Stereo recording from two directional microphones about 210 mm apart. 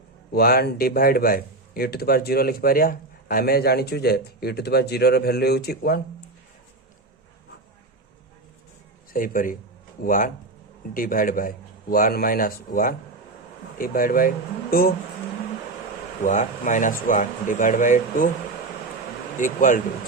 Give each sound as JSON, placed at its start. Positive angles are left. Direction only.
{"t": 0.3, "sound": "a man's voice", "side_deg": 45}
{"t": 9.1, "sound": "a man's voice", "side_deg": 40}
{"t": 16.2, "sound": "speech", "side_deg": 35}
{"t": 19.4, "sound": "speech", "side_deg": 35}